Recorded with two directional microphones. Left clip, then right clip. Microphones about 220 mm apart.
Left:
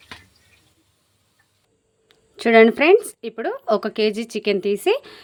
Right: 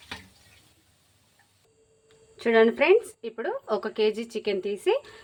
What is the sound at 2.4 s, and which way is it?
A woman's voice, 50° left (ahead or behind).